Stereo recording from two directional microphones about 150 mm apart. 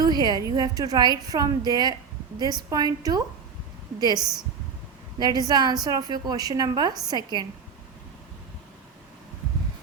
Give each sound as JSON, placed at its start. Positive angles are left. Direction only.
{"t": 0.0, "sound": "a woman's voice", "side_deg": -25}
{"t": 5.2, "sound": "a woman's voice", "side_deg": -25}